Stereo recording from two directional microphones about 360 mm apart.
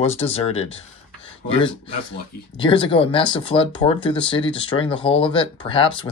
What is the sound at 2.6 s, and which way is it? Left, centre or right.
Speech, centre.